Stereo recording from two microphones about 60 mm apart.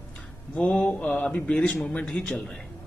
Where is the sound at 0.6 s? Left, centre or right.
Centre.